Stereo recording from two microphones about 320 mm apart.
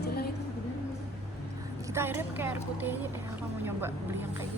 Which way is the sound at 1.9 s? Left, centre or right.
Centre.